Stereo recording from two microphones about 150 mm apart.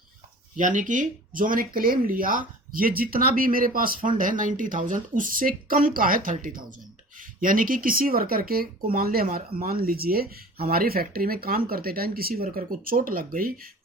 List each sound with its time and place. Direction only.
0.5 s speech: 60° right (ahead or behind)